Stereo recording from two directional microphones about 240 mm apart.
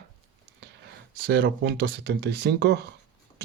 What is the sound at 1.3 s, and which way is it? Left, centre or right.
Speech, right.